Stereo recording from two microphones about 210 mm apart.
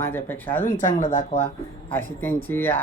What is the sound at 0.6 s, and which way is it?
Speech, 40° left (ahead or behind).